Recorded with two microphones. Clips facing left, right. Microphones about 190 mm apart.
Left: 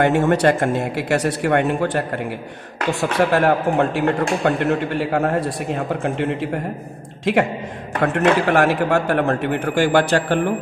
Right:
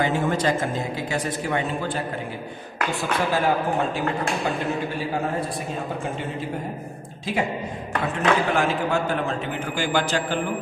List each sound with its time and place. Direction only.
0.0 s speech: 70° left (ahead or behind)
2.9 s speech: 80° left
8.0 s speech: 70° left (ahead or behind)